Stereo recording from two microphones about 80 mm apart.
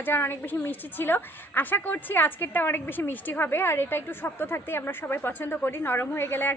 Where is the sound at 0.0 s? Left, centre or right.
Left.